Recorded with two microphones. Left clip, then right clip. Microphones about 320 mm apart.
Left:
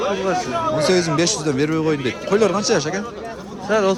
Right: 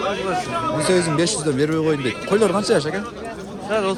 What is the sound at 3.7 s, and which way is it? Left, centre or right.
Speech, left.